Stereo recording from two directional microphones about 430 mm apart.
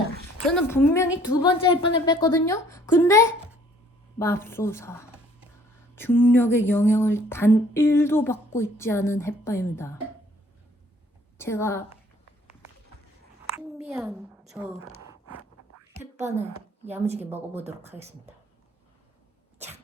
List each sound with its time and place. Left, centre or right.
0.4 s a woman's voice: centre
11.3 s a woman's voice: centre
13.6 s a sound: centre
16.1 s a woman's voice: centre